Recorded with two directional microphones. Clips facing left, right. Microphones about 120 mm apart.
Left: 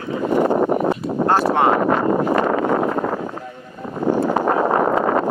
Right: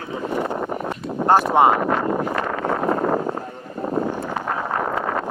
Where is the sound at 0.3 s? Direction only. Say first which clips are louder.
Left 9 dB; 45° left (ahead or behind).